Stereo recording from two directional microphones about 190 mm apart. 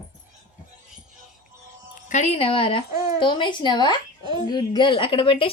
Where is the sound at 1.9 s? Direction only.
40° left (ahead or behind).